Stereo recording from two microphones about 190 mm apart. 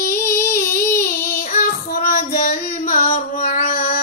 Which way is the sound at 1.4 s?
45° left (ahead or behind).